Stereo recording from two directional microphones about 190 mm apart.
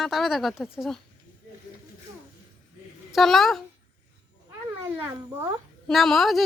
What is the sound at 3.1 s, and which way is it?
Speech, centre (ahead or behind).